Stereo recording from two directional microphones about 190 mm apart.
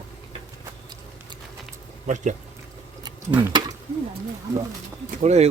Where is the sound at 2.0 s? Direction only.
40° right (ahead or behind).